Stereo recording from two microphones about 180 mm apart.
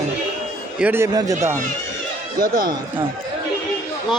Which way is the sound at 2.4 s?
55° right (ahead or behind).